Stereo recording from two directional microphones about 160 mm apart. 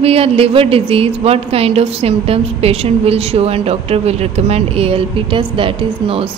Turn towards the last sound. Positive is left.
turn(degrees=-35)  # may be behind; listen again after turning